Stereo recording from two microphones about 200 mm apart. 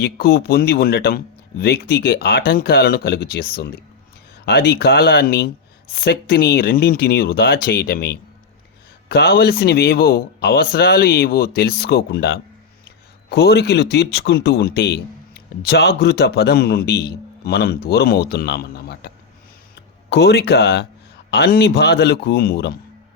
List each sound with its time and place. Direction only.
0.0 s speech: 50° left (ahead or behind)